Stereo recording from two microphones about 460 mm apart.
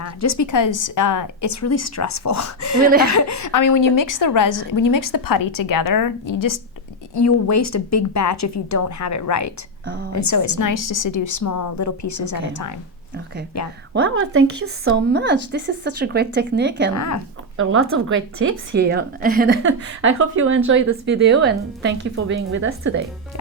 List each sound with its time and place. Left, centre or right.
0.0 s a woman's voice: left
13.9 s a woman's voice: right
16.9 s a woman's voice: left
17.6 s a woman's voice: right